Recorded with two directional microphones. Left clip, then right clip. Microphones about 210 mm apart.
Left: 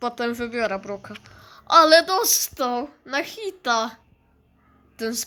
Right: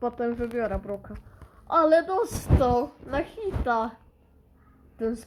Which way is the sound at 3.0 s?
10° left (ahead or behind).